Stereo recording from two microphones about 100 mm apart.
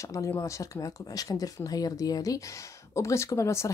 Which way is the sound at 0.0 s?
30° left (ahead or behind).